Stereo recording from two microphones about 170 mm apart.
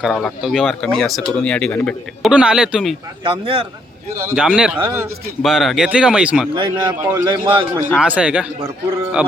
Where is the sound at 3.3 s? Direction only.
30° right (ahead or behind).